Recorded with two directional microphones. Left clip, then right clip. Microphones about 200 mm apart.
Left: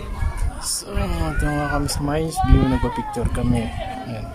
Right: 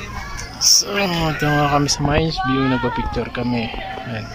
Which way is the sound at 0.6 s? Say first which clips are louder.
Right 16 dB; 20° left (ahead or behind).